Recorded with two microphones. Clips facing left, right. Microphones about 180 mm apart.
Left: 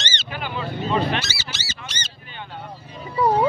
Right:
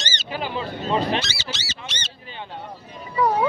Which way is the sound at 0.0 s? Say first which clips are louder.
Right 2 dB; 30° right (ahead or behind).